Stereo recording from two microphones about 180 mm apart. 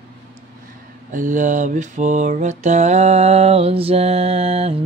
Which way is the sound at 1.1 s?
45° right (ahead or behind).